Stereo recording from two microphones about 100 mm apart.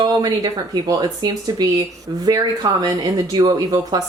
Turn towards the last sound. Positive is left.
turn(degrees=-40)  # may be behind; listen again after turning